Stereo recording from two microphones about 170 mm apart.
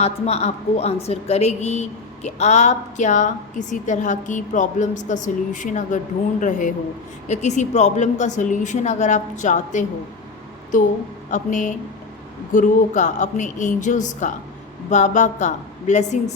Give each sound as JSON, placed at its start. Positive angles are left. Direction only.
{"t": 0.0, "sound": "a woman's voice", "side_deg": 40}